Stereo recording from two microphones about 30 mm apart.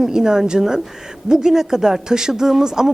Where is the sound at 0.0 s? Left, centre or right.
Centre.